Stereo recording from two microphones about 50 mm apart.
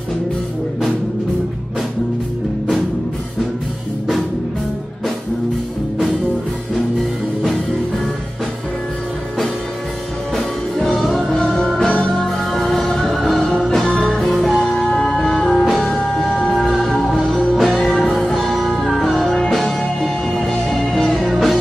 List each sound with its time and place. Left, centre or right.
10.3 s music: centre
15.6 s music: centre
16.3 s music: centre
17.0 s music: centre